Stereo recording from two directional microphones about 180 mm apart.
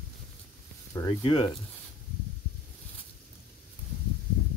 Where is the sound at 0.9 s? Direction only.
25° left (ahead or behind).